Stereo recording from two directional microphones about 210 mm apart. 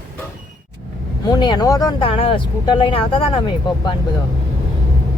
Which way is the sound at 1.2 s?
20° left (ahead or behind).